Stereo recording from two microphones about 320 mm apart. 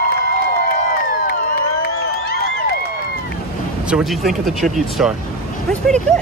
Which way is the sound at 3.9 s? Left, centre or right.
Centre.